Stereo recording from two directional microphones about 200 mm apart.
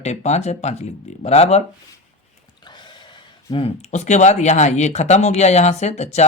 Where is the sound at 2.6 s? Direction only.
20° left (ahead or behind).